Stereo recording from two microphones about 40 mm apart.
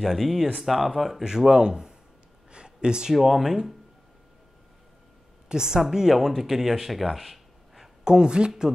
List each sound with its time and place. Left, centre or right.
0.0 s speech: centre
1.2 s a woman's voice: centre
2.5 s a sound: right
3.2 s speech: centre
5.5 s a woman's voice: centre
8.0 s speech: centre